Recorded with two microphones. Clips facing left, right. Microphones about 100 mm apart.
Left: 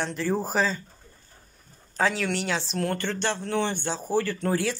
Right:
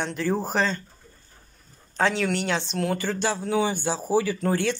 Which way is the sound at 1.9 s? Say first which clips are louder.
Right 2 dB; centre (ahead or behind).